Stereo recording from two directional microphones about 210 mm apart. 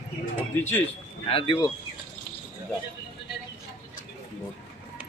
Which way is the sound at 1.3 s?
25° left (ahead or behind).